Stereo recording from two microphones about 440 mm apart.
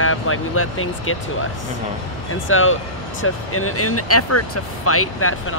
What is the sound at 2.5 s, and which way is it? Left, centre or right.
Speech, left.